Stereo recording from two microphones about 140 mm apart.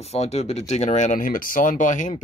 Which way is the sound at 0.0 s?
50° left (ahead or behind).